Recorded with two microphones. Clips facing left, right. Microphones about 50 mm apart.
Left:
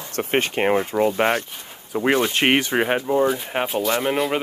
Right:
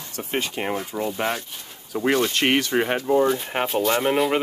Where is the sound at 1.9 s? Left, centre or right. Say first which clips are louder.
Left 2 dB; left.